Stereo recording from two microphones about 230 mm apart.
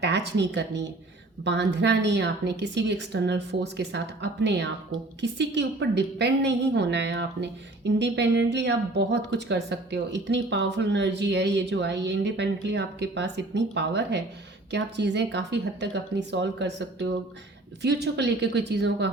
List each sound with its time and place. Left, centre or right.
0.0 s a woman's voice: right